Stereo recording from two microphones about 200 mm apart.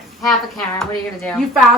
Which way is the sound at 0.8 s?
5° left (ahead or behind).